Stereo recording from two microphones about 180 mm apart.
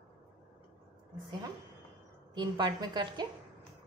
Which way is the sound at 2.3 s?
25° right (ahead or behind).